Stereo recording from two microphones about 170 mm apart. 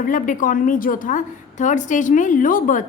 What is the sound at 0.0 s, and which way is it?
A woman's voice, 50° left (ahead or behind).